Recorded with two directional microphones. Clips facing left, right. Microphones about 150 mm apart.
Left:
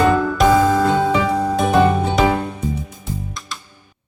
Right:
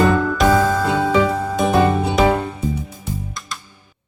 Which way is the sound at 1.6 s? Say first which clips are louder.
Even; 5° right (ahead or behind).